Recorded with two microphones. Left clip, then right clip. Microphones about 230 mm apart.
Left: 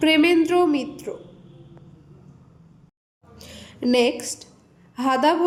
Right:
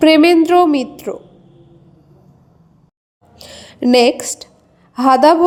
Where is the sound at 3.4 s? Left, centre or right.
Right.